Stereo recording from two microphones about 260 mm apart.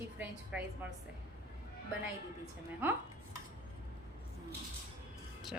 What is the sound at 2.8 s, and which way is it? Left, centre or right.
Speech, centre.